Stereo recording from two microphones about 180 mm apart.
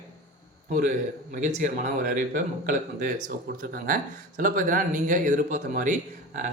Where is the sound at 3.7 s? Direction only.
50° right (ahead or behind).